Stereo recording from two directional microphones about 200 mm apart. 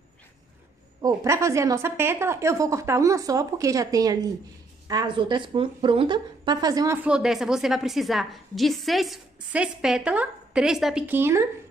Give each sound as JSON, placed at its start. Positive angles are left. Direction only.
{"t": 1.0, "sound": "a woman's voice", "side_deg": -15}